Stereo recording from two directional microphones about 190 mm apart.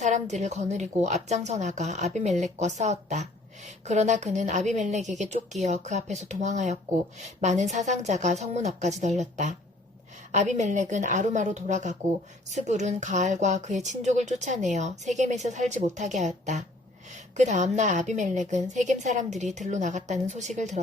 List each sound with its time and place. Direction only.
0.0 s a woman's voice: 35° right (ahead or behind)
10.3 s a woman's voice: 40° right (ahead or behind)